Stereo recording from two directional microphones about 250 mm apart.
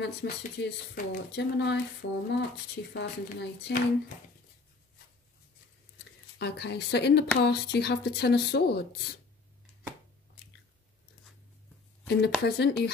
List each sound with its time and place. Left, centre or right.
0.0 s speech: left
6.3 s speech: left
12.1 s speech: left